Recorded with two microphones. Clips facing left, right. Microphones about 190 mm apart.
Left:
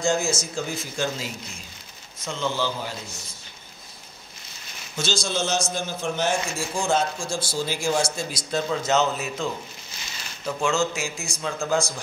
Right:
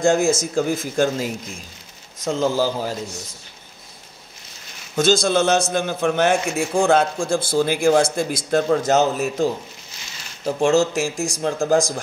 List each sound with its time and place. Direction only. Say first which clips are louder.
0.0 s speech: right 7 dB; 55° right (ahead or behind)
2.2 s a man's voice: right 7 dB; 40° right (ahead or behind)
4.9 s a man's voice: right 10 dB; 55° right (ahead or behind)